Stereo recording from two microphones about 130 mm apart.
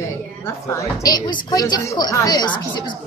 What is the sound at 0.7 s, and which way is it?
A woman's voice, 30° left (ahead or behind).